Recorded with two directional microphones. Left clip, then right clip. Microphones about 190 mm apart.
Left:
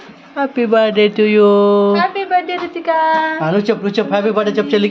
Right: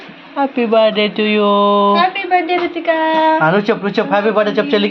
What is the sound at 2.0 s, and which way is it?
Music, 45° left (ahead or behind).